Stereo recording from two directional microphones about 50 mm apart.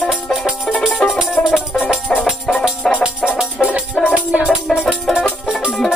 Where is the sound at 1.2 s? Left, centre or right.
Centre.